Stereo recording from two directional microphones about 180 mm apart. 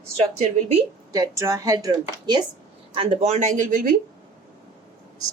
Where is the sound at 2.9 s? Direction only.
35° right (ahead or behind).